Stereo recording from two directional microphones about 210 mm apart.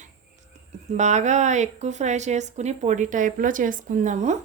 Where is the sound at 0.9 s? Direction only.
35° right (ahead or behind).